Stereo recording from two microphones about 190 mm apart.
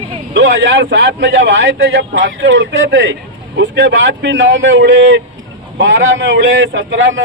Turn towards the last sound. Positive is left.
turn(degrees=-75)  # may be behind; listen again after turning